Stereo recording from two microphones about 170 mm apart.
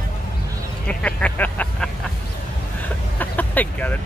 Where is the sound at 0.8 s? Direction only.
5° left (ahead or behind).